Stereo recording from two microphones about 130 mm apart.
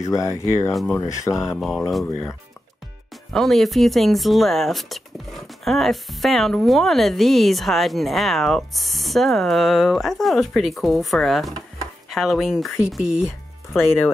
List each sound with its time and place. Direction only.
0.0 s speech: 25° left (ahead or behind)
0.7 s speech: centre (ahead or behind)
0.9 s speech: 25° left (ahead or behind)
1.4 s speech: centre (ahead or behind)
3.3 s speech: centre (ahead or behind)